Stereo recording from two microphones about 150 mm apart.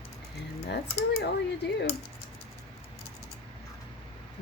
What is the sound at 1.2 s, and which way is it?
Speech, 90° left.